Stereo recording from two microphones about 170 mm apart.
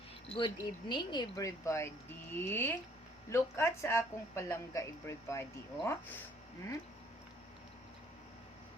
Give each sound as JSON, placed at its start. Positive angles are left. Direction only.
{"t": 0.3, "sound": "speech", "side_deg": 30}